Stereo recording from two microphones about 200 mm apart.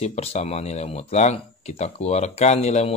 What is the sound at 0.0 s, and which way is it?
Speech, 30° left (ahead or behind).